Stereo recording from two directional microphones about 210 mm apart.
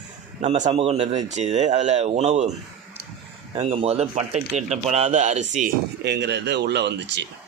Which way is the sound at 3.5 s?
25° right (ahead or behind).